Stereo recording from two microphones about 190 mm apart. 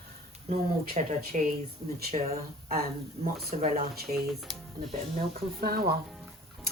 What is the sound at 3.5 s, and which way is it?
Speech, 40° right (ahead or behind).